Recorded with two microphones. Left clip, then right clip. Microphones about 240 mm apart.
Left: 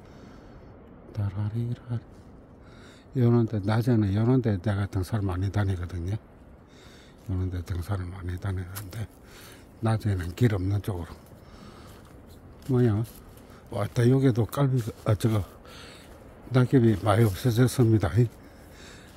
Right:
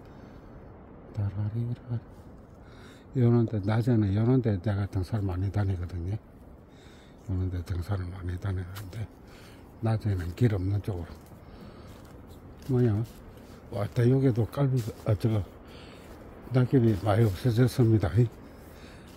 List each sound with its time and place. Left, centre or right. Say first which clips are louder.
1.1 s speech: left 2 dB; centre
3.2 s speech: left 1 dB; centre
7.2 s speech: left 1 dB; centre
12.7 s speech: left 2 dB; centre